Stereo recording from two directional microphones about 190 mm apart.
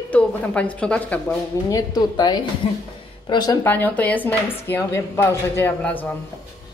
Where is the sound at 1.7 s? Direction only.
20° left (ahead or behind).